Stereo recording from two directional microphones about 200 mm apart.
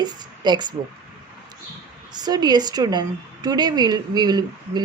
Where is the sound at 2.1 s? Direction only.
20° right (ahead or behind).